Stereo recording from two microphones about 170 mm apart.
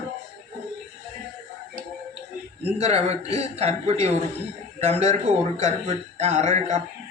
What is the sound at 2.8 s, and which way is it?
A man's voice, 40° right (ahead or behind).